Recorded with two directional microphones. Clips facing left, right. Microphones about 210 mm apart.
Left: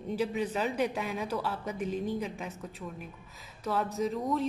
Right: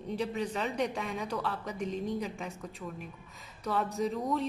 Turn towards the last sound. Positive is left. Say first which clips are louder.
# left 1 dB
turn(degrees=0)  # may be behind; listen again after turning